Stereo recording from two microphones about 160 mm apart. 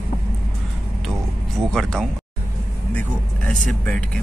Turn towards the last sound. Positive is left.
turn(degrees=10)  # may be behind; listen again after turning